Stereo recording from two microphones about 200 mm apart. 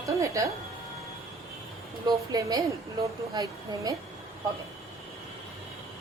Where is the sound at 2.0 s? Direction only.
20° right (ahead or behind).